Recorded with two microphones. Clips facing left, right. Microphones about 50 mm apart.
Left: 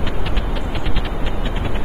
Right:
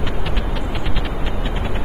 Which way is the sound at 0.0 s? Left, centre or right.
Centre.